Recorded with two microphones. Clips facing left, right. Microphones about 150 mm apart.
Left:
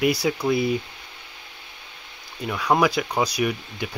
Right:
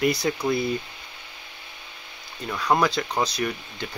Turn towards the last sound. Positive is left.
turn(degrees=10)  # may be behind; listen again after turning